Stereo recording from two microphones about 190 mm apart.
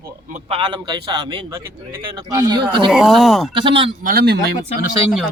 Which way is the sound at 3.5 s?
25° right (ahead or behind).